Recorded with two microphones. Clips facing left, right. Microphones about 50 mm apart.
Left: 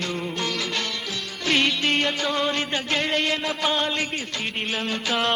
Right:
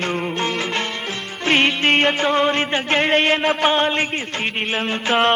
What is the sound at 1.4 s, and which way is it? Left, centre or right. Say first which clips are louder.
Music: right 5 dB; right.